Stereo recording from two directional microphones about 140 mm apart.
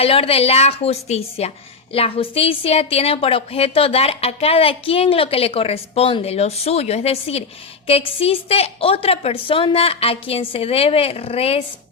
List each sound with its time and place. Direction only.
0.0 s speech: 45° left (ahead or behind)